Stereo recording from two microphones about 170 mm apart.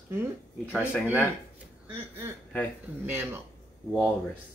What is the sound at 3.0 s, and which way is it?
Speech, 10° right (ahead or behind).